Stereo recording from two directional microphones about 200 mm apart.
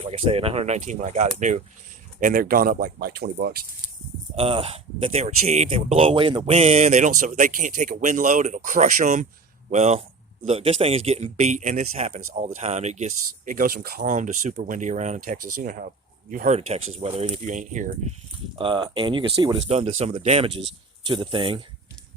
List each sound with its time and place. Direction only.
0.0 s speech: 30° right (ahead or behind); by 3.7 s 50° right (ahead or behind)
4.4 s speech: 30° right (ahead or behind); by 16.6 s 45° right (ahead or behind)
16.6 s speech: 30° right (ahead or behind)
18.5 s speech: 25° right (ahead or behind)
19.6 s speech: 30° right (ahead or behind)